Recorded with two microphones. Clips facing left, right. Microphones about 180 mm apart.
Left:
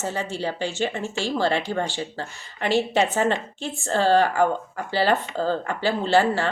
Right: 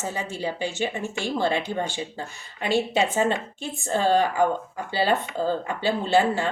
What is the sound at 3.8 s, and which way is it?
A woman's voice, 15° right (ahead or behind).